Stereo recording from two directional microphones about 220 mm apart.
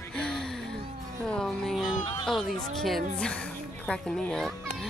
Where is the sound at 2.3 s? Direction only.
Centre (ahead or behind).